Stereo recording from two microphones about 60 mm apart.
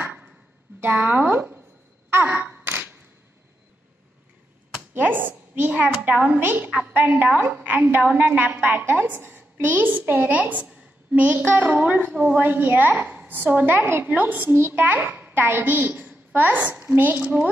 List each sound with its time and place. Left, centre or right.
0.7 s speech: right
2.0 s sigh: right
2.6 s a sound: right
4.9 s a woman's voice: right
14.0 s a woman's voice: right